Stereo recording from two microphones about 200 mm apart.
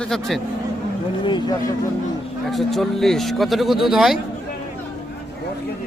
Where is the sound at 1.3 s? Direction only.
20° left (ahead or behind).